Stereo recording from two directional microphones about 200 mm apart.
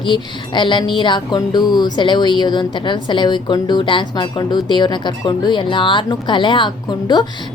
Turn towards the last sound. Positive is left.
turn(degrees=20)  # may be behind; listen again after turning